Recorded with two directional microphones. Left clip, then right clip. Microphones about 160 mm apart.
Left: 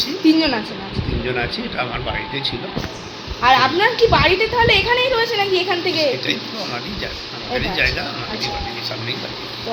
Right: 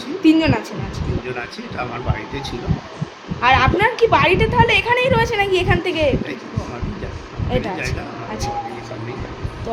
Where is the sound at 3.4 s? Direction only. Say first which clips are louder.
Left 1 dB; 5° right (ahead or behind); by 5.9 s 25° right (ahead or behind).